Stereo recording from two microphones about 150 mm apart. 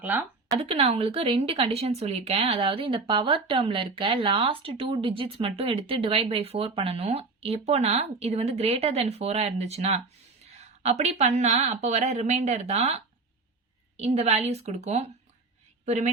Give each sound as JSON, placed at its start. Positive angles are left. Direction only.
{"t": 0.0, "sound": "speech", "side_deg": -10}
{"t": 0.6, "sound": "speech", "side_deg": -45}